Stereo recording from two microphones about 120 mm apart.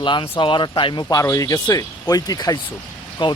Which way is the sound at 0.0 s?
40° left (ahead or behind).